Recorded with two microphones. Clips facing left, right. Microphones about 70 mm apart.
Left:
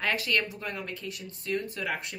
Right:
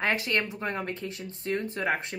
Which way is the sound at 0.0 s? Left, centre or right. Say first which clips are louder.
Right 1 dB; right.